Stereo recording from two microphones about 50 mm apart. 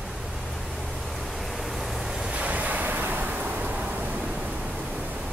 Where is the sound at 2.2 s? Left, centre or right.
Right.